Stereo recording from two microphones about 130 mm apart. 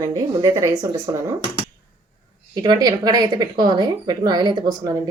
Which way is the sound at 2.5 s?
30° right (ahead or behind).